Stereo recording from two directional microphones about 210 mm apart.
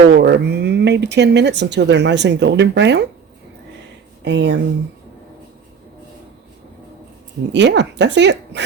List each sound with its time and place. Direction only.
0.1 s speech: 50° right (ahead or behind)
4.2 s speech: 55° right (ahead or behind)
7.5 s speech: 55° right (ahead or behind)